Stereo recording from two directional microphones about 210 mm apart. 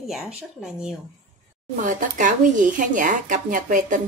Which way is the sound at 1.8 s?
40° right (ahead or behind).